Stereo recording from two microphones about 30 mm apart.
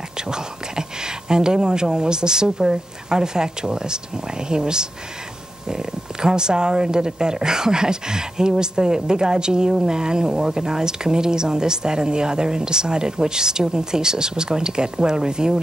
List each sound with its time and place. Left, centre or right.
0.2 s speech: right